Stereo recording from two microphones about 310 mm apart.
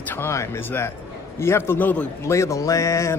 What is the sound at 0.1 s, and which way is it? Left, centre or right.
A man's voice, centre.